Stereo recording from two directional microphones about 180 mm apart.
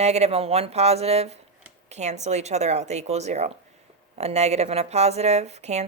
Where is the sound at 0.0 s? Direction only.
35° right (ahead or behind).